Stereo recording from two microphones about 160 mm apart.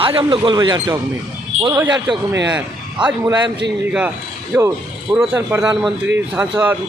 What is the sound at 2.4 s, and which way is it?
Speech, 5° right (ahead or behind).